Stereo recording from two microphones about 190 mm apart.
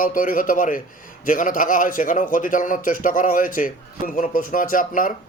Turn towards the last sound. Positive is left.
turn(degrees=45)  # may be behind; listen again after turning